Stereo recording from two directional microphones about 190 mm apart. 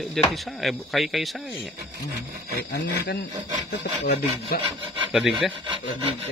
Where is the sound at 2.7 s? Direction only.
60° left (ahead or behind).